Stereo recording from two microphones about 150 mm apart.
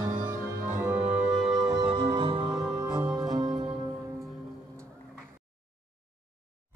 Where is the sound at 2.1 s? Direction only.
35° right (ahead or behind).